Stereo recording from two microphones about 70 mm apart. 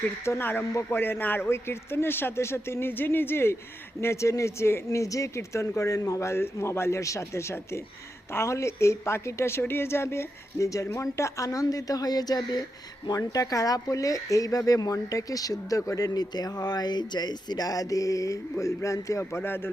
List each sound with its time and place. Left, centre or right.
0.3 s speech: left